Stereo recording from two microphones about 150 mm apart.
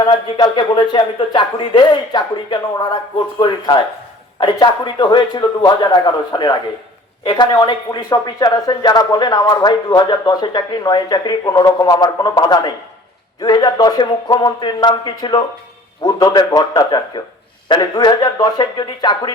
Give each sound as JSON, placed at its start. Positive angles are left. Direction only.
{"t": 0.0, "sound": "speech", "side_deg": 25}